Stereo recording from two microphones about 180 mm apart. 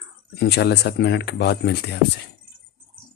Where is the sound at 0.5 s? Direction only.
70° left (ahead or behind).